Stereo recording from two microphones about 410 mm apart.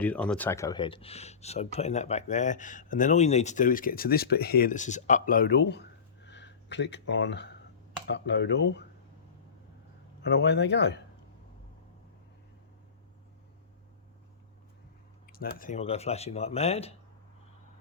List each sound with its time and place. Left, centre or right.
0.0 s speech: centre; by 8.9 s left
10.2 s speech: left
15.3 s speech: left